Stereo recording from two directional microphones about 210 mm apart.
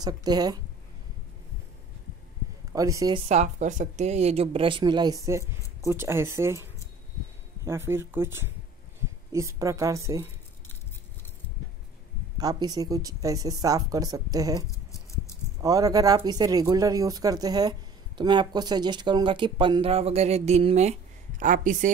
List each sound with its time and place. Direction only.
0.0 s speech: 20° right (ahead or behind)
2.7 s speech: 15° right (ahead or behind)
3.3 s speech: 35° right (ahead or behind); by 10.2 s 15° right (ahead or behind)
12.4 s speech: 20° right (ahead or behind); by 21.9 s 40° right (ahead or behind)